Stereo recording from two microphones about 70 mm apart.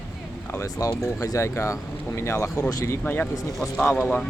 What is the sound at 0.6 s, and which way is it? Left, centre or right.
Speech, left.